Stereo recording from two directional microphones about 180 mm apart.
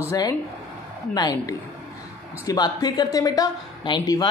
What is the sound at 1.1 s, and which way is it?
A woman's voice, 20° left (ahead or behind).